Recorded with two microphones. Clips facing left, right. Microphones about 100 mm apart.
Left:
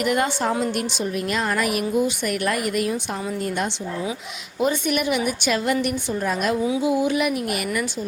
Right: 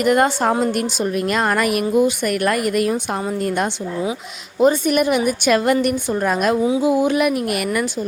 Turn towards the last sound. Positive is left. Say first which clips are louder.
# right 4 dB
turn(degrees=-50)  # may be behind; listen again after turning